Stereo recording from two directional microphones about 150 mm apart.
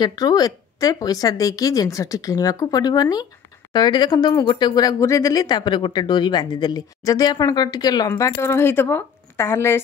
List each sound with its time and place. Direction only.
0.0 s speech: 25° left (ahead or behind)